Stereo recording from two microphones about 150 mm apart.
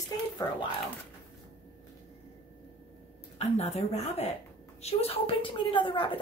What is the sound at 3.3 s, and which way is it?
A woman's voice, 45° left (ahead or behind).